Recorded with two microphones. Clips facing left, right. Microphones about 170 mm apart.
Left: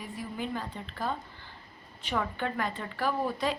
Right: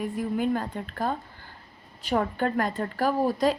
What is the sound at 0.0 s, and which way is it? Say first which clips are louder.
A woman's voice: right 10 dB; 50° right (ahead or behind).